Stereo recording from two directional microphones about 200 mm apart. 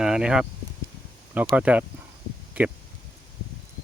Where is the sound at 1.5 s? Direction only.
5° right (ahead or behind).